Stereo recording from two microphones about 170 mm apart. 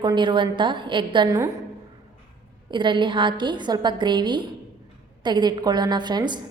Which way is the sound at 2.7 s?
30° right (ahead or behind).